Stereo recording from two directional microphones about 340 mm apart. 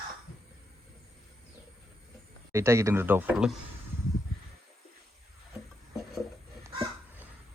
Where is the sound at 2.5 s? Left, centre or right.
Centre.